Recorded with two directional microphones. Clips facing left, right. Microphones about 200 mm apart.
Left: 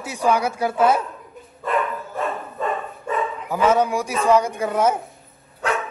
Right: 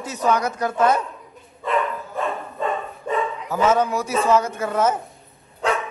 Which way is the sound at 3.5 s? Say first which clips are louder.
Left 1 dB; 10° left (ahead or behind).